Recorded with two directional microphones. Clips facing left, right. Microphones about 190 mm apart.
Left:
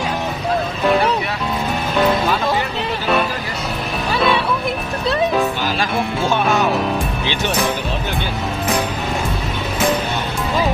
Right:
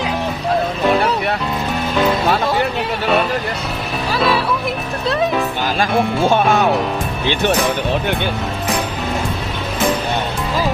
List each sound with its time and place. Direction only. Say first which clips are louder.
4.1 s music: even; centre (ahead or behind)
6.3 s music: right 2 dB; 55° right (ahead or behind)